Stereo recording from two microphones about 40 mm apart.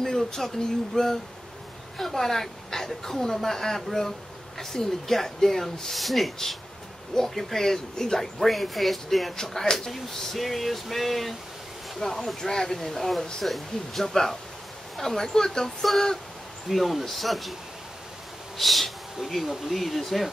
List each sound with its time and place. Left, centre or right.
0.0 s speech: centre
1.0 s speech: centre
2.0 s a woman's voice: centre
18.6 s speech: centre